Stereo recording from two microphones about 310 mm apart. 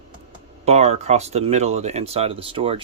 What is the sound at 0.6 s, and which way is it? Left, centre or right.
Speech, centre.